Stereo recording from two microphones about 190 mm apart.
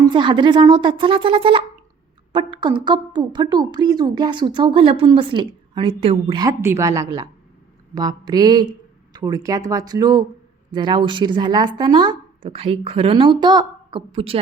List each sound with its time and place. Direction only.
0.0 s a woman's voice: 25° right (ahead or behind)
6.4 s a woman's voice: 15° right (ahead or behind)